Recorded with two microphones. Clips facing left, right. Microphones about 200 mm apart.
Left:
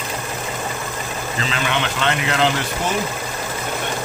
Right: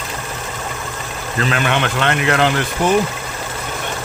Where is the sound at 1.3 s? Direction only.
55° right (ahead or behind).